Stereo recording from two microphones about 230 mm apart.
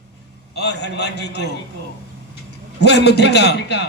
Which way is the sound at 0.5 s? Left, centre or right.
Left.